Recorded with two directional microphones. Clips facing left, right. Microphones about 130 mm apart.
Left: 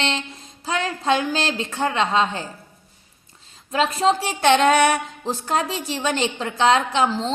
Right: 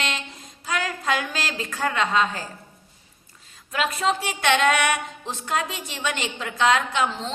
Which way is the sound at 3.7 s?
30° left (ahead or behind).